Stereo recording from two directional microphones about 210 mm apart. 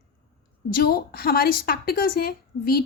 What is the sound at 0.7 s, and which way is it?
A woman's voice, 45° left (ahead or behind).